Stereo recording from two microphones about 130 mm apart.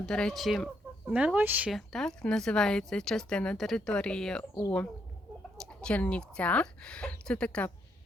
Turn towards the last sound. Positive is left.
turn(degrees=10)  # may be behind; listen again after turning